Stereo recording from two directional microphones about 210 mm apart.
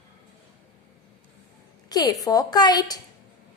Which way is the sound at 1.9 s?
15° left (ahead or behind).